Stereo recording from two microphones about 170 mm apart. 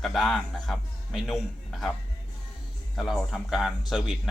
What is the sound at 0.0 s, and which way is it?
Speech, centre (ahead or behind).